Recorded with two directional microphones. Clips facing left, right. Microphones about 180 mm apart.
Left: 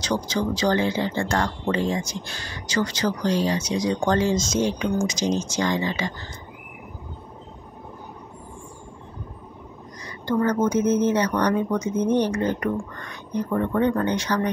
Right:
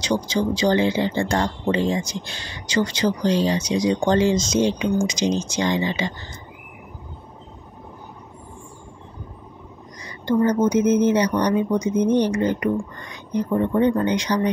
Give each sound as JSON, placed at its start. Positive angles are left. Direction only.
{"t": 0.1, "sound": "speech", "side_deg": -15}
{"t": 10.2, "sound": "speech", "side_deg": -15}